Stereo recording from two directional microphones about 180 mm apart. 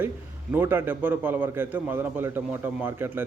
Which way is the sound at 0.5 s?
10° right (ahead or behind).